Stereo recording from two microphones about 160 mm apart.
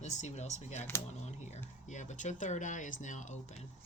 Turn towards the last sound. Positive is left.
turn(degrees=50)  # may be behind; listen again after turning